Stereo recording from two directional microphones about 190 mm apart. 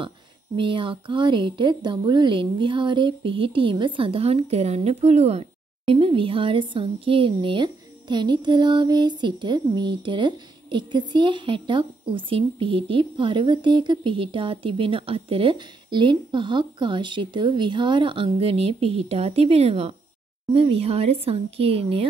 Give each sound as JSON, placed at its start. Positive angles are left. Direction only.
{"t": 0.6, "sound": "a woman's voice", "side_deg": -25}